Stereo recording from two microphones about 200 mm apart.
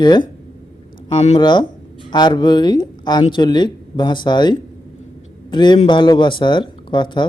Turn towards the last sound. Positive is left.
turn(degrees=25)  # may be behind; listen again after turning